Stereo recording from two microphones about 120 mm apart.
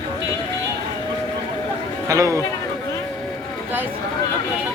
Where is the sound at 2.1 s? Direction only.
25° right (ahead or behind).